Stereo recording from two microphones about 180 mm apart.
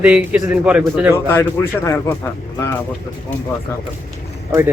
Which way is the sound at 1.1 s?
15° left (ahead or behind).